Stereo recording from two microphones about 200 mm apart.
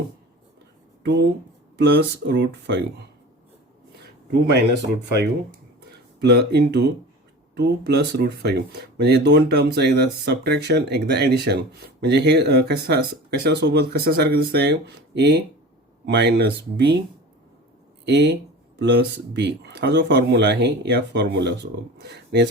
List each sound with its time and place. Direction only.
1.0 s speech: 55° right (ahead or behind)
4.3 s speech: 55° right (ahead or behind)
18.0 s speech: 60° right (ahead or behind)